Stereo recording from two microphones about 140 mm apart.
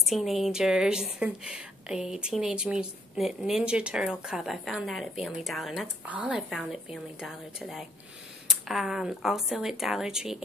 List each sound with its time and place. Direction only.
0.0 s a woman's voice: centre (ahead or behind)
8.5 s a woman's voice: 5° right (ahead or behind)